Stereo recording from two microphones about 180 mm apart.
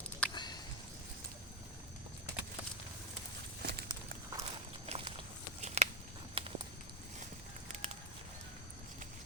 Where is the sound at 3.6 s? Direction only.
65° right (ahead or behind).